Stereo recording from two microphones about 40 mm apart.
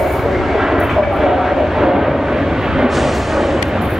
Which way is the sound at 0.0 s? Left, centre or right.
Centre.